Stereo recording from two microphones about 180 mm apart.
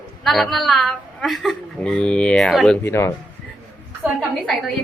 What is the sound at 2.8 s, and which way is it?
Speech, 15° left (ahead or behind).